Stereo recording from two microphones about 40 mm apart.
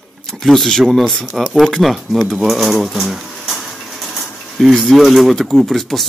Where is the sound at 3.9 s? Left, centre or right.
Centre.